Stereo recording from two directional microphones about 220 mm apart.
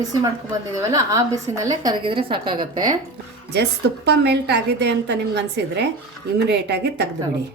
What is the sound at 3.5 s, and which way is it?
A woman's voice, 50° right (ahead or behind).